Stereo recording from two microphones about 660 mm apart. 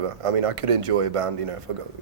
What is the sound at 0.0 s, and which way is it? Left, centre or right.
Speech, right.